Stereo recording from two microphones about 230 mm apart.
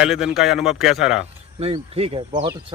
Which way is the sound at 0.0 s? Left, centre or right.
Centre.